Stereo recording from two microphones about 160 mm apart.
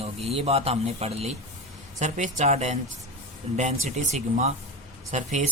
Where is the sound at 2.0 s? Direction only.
50° right (ahead or behind).